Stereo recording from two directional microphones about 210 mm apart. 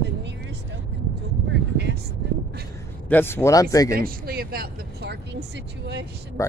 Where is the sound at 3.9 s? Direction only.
45° right (ahead or behind).